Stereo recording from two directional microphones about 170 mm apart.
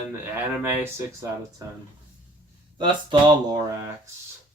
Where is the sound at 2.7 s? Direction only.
25° right (ahead or behind).